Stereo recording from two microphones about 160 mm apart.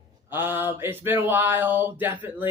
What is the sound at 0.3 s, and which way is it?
Speech, 15° right (ahead or behind).